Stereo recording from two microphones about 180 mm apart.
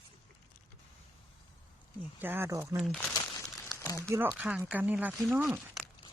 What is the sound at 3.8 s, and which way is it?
Crumpling, 15° left (ahead or behind).